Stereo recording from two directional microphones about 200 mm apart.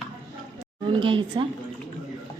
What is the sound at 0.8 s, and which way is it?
Speech, 25° right (ahead or behind).